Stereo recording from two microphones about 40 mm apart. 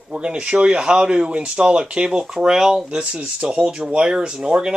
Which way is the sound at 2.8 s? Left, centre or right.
Right.